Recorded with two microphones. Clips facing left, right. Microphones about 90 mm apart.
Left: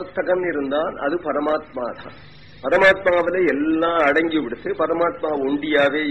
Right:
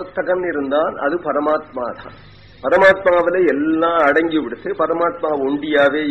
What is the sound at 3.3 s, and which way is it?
A man's voice, 45° right (ahead or behind).